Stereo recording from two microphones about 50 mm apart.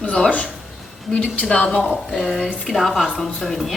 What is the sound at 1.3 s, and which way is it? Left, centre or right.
Speech, left.